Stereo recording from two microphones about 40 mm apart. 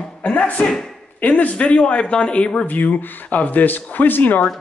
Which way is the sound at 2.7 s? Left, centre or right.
Left.